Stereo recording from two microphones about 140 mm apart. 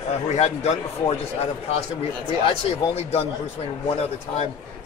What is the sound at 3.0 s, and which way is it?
Speech, 50° left (ahead or behind).